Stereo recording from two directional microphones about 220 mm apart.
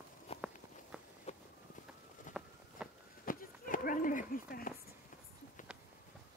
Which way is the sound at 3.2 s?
40° left (ahead or behind).